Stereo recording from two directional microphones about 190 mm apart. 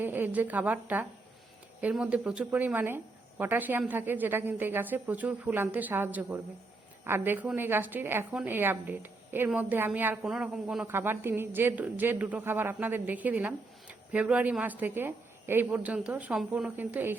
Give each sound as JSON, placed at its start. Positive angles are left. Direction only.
{"t": 0.0, "sound": "a woman's voice", "side_deg": -10}